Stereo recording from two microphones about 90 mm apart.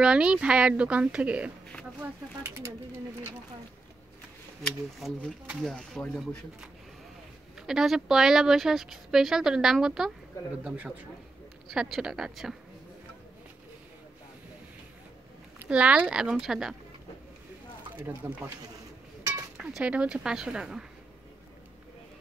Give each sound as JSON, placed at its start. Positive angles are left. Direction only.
{"t": 0.0, "sound": "speech", "side_deg": -10}
{"t": 2.4, "sound": "a sound", "side_deg": -30}
{"t": 5.0, "sound": "speech", "side_deg": 0}
{"t": 7.5, "sound": "speech", "side_deg": -5}
{"t": 15.7, "sound": "speech", "side_deg": -15}
{"t": 17.9, "sound": "speech", "side_deg": -25}
{"t": 19.7, "sound": "speech", "side_deg": -15}